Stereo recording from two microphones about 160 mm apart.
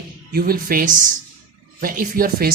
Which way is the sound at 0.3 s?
70° right (ahead or behind).